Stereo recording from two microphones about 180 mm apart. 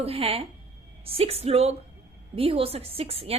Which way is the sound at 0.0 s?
30° right (ahead or behind).